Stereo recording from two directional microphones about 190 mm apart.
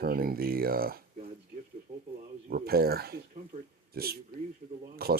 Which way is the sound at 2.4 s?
55° right (ahead or behind).